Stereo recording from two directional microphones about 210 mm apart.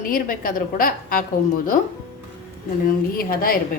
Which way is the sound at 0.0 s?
40° left (ahead or behind).